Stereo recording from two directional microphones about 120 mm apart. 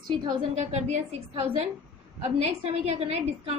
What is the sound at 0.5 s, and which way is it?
A woman's voice, 70° right (ahead or behind).